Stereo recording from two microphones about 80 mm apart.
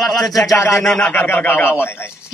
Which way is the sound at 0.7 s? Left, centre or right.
Centre.